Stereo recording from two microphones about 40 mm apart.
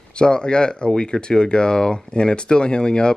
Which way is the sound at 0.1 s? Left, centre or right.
Left.